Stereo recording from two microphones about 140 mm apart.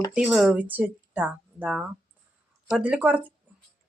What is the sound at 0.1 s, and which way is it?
Speech, 5° right (ahead or behind).